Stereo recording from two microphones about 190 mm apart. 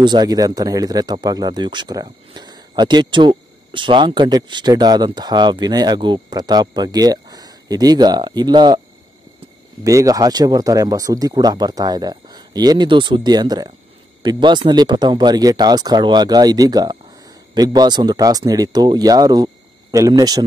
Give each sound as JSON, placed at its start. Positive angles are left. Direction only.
{"t": 0.0, "sound": "speech", "side_deg": -20}
{"t": 9.8, "sound": "speech", "side_deg": -15}